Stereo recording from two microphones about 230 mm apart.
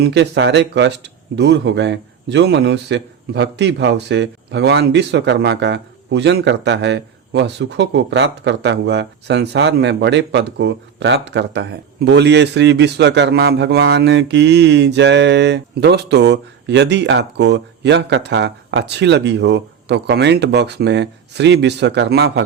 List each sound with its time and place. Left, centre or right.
0.0 s speech: right